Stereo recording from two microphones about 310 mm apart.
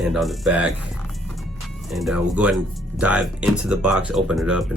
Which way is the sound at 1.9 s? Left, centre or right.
Centre.